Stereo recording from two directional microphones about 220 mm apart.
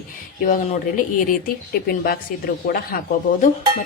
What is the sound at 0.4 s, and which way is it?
Speech, 35° left (ahead or behind).